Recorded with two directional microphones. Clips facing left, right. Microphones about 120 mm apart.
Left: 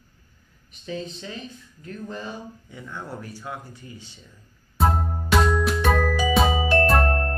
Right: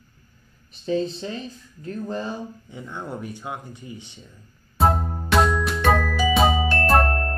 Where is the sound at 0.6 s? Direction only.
35° right (ahead or behind).